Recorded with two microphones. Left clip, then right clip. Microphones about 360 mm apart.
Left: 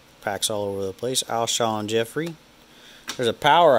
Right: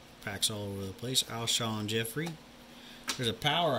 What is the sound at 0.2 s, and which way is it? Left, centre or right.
Speech, centre.